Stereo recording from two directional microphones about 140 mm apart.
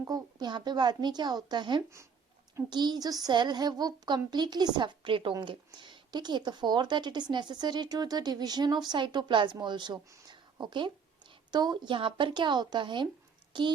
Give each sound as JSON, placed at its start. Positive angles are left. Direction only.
{"t": 0.0, "sound": "speech", "side_deg": -30}